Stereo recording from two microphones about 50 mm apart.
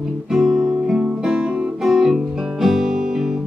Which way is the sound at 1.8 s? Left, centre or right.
Centre.